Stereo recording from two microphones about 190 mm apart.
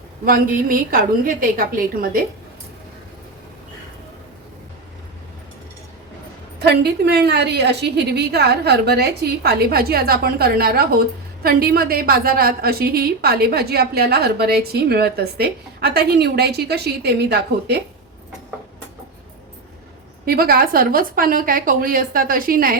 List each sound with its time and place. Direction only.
0.3 s a woman's voice: 50° right (ahead or behind)
6.6 s a woman's voice: 60° right (ahead or behind)
20.2 s a woman's voice: 50° right (ahead or behind)